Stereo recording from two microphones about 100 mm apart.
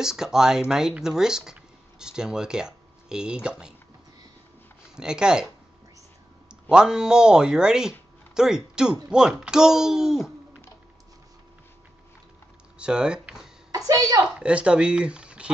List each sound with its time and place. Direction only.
0.0 s speech: 5° right (ahead or behind)
4.9 s speech: 5° right (ahead or behind)
6.5 s speech: 10° right (ahead or behind)
12.7 s speech: 10° right (ahead or behind)
13.7 s a woman's voice: 35° right (ahead or behind)
14.2 s speech: 10° right (ahead or behind)